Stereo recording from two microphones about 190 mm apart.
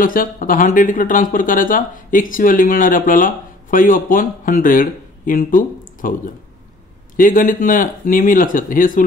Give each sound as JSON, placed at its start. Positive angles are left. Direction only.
{"t": 0.0, "sound": "speech", "side_deg": 45}